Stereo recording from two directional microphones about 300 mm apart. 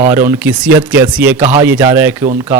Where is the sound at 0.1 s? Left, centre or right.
Centre.